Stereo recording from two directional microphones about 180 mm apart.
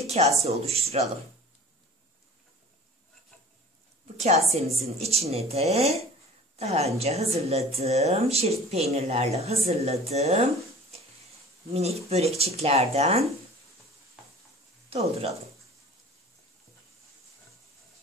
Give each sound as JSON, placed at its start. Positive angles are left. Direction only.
{"t": 0.0, "sound": "a woman's voice", "side_deg": -35}
{"t": 4.2, "sound": "a woman's voice", "side_deg": -35}
{"t": 14.9, "sound": "speech", "side_deg": -35}